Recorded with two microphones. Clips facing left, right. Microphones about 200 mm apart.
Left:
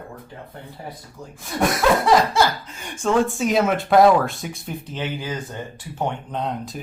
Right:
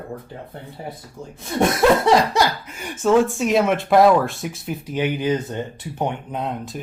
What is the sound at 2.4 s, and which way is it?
Speech, 10° right (ahead or behind).